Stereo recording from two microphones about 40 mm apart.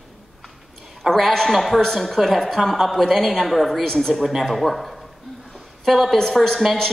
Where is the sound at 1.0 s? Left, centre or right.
Centre.